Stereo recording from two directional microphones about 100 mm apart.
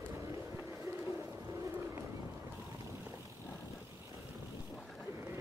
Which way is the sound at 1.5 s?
30° right (ahead or behind).